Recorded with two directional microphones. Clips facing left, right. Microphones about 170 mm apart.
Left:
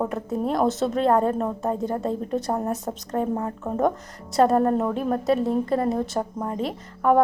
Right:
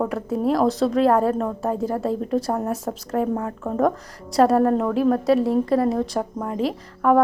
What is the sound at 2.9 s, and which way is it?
Speech, 20° left (ahead or behind).